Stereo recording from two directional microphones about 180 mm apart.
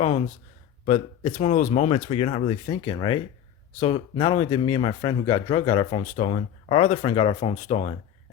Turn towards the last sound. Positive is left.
turn(degrees=40)  # may be behind; listen again after turning